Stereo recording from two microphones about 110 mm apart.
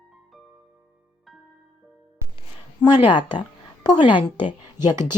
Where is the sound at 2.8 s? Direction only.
45° left (ahead or behind).